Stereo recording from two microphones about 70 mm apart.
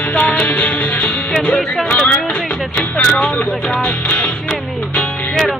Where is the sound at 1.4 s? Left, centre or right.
Centre.